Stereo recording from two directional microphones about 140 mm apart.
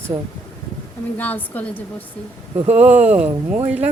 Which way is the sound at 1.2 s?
10° left (ahead or behind).